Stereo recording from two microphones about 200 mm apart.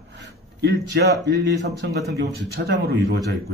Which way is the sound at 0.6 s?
55° right (ahead or behind).